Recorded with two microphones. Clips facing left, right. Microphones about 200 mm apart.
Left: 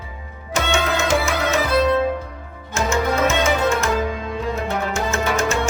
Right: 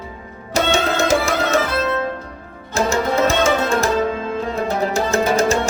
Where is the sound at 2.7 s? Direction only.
35° right (ahead or behind).